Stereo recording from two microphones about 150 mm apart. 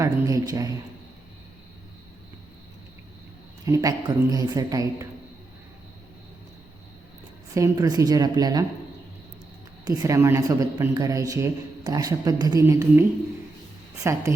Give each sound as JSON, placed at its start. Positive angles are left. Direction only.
{"t": 0.0, "sound": "speech", "side_deg": -25}
{"t": 3.7, "sound": "speech", "side_deg": -25}
{"t": 7.5, "sound": "speech", "side_deg": -25}
{"t": 9.8, "sound": "speech", "side_deg": -20}